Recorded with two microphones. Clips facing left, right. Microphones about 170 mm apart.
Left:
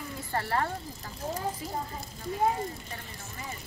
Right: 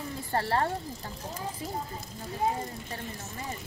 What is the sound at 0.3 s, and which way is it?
Speech, 30° right (ahead or behind).